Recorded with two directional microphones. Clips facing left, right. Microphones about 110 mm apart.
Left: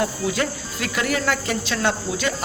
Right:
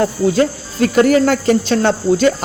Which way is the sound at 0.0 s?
35° right (ahead or behind).